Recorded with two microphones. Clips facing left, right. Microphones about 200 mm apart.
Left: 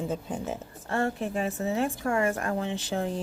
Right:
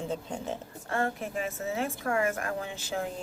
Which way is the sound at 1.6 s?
35° left (ahead or behind).